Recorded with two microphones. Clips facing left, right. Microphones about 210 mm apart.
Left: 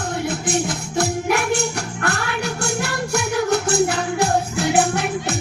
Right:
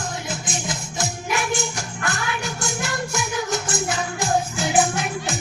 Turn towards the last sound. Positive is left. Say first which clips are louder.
# left 4 dB
turn(degrees=65)  # may be behind; listen again after turning